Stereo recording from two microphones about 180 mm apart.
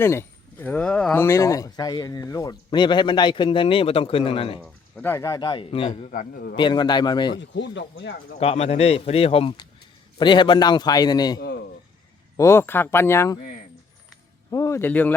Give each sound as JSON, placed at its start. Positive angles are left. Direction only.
{"t": 0.0, "sound": "speech", "side_deg": 15}
{"t": 4.9, "sound": "a man's voice", "side_deg": 15}
{"t": 6.6, "sound": "speech", "side_deg": 25}
{"t": 7.3, "sound": "speech", "side_deg": 85}
{"t": 8.4, "sound": "a man's voice", "side_deg": 35}
{"t": 11.3, "sound": "a man's voice", "side_deg": 65}
{"t": 12.4, "sound": "speech", "side_deg": 15}
{"t": 14.5, "sound": "a man's voice", "side_deg": 15}